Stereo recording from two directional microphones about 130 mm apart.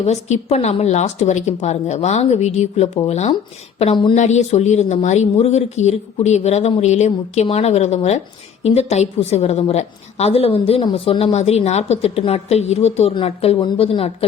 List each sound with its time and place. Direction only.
0.0 s a woman's voice: 60° left (ahead or behind)